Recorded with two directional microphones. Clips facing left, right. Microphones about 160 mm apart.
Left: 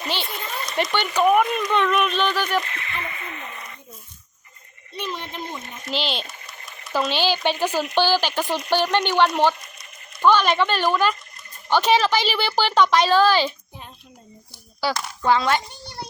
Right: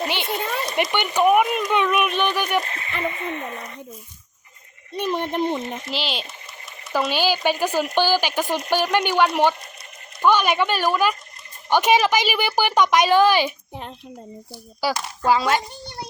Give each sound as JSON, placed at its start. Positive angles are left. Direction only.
{"t": 0.3, "sound": "a sound", "side_deg": -65}
{"t": 0.8, "sound": "speech", "side_deg": -15}
{"t": 2.6, "sound": "speech", "side_deg": -35}
{"t": 4.9, "sound": "speech", "side_deg": -50}
{"t": 5.9, "sound": "a woman's voice", "side_deg": -5}
{"t": 14.8, "sound": "a woman's voice", "side_deg": -10}